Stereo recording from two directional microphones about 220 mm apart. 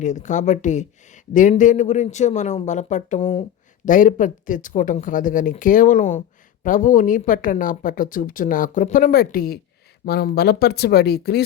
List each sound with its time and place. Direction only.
0.0 s speech: 35° left (ahead or behind)